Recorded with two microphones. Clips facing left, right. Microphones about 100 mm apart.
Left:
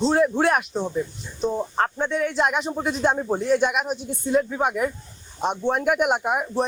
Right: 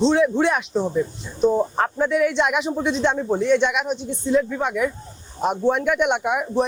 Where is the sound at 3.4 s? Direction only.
40° left (ahead or behind).